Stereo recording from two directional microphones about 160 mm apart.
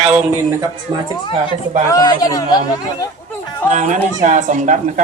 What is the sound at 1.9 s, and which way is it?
Speech, 25° left (ahead or behind).